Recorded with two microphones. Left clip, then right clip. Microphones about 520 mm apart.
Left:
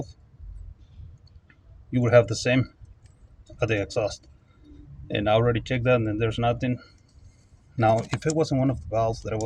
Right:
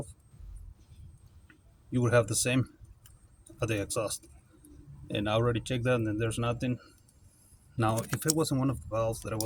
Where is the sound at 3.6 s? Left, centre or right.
Right.